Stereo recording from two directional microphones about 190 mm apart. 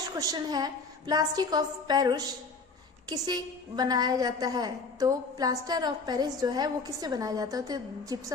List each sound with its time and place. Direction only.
0.2 s a woman's voice: 20° right (ahead or behind)